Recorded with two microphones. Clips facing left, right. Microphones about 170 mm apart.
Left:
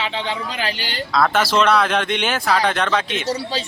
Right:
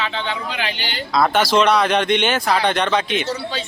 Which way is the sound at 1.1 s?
Centre (ahead or behind).